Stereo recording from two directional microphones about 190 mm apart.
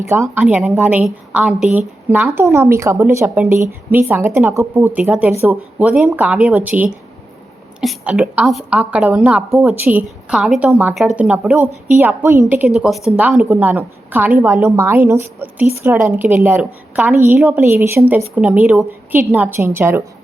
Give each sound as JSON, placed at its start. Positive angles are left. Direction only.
{"t": 0.1, "sound": "a woman's voice", "side_deg": -10}